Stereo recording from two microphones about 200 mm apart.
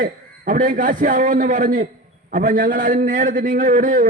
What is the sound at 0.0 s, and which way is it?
A man's voice, 45° right (ahead or behind).